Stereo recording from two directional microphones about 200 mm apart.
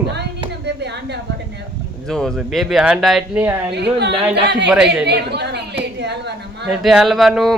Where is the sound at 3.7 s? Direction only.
60° right (ahead or behind).